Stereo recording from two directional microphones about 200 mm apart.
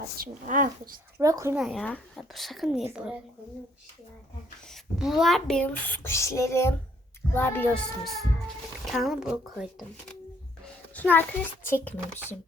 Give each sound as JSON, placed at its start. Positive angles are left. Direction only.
{"t": 0.2, "sound": "speech", "side_deg": -40}
{"t": 1.2, "sound": "speech", "side_deg": -15}
{"t": 1.5, "sound": "speech", "side_deg": 0}
{"t": 4.7, "sound": "speech", "side_deg": 0}
{"t": 10.9, "sound": "speech", "side_deg": 10}